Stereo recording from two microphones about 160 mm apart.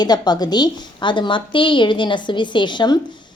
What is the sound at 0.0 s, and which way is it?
A woman's voice, 25° left (ahead or behind).